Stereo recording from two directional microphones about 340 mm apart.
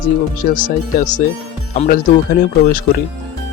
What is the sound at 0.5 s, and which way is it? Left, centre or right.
Speech, left.